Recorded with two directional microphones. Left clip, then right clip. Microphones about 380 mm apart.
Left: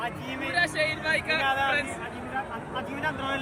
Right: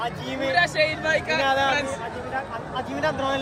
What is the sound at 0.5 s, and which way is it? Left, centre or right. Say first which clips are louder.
Speech: right 4 dB; right.